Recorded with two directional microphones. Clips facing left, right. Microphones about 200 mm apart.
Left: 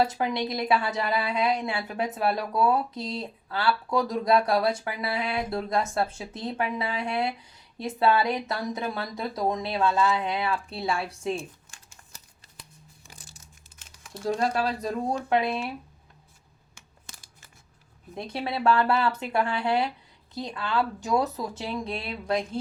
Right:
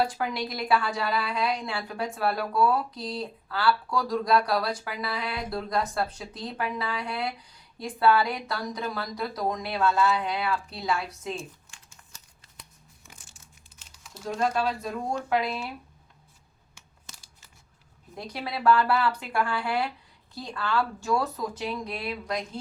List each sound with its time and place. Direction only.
0.0 s a woman's voice: 25° left (ahead or behind)
11.7 s crumpling: 40° left (ahead or behind)
13.7 s crumpling: 60° left (ahead or behind)
14.3 s speech: 35° left (ahead or behind)
15.3 s a woman's voice: 25° left (ahead or behind)
16.7 s crumpling: 50° left (ahead or behind)
18.1 s a woman's voice: 25° left (ahead or behind)